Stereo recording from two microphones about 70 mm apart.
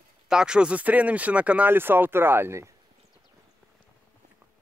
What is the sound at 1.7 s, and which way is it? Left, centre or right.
Speech, right.